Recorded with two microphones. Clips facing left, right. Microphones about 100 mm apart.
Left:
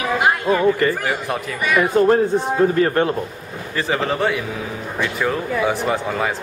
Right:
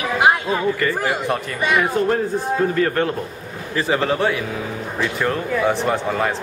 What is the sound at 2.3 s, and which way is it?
Speech, 20° left (ahead or behind).